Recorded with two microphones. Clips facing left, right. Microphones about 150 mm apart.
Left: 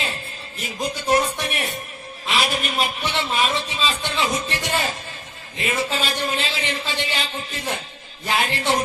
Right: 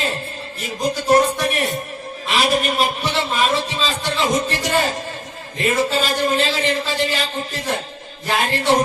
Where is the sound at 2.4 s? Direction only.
45° right (ahead or behind).